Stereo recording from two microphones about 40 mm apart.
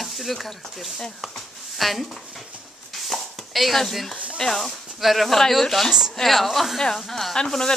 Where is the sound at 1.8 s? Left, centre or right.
Centre.